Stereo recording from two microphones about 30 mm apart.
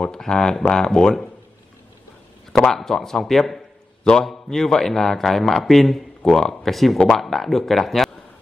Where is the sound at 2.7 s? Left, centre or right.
Centre.